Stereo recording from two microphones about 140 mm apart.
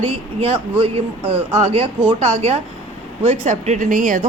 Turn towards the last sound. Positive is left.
turn(degrees=-70)  # may be behind; listen again after turning